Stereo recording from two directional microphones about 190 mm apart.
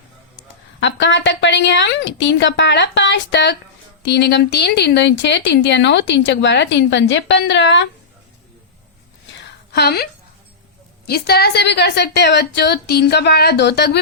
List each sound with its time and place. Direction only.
0.8 s speech: 70° left (ahead or behind)
9.7 s a woman's voice: 55° left (ahead or behind)